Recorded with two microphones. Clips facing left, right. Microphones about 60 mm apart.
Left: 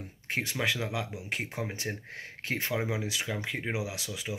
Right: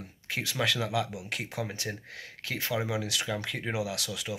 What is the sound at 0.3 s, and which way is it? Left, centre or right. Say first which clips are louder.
Speech: even; left.